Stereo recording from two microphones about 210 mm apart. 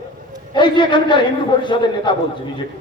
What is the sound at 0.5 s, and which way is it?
A man's voice, 20° left (ahead or behind).